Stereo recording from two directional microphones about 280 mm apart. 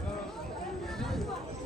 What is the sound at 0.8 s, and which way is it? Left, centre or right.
Chatter, centre.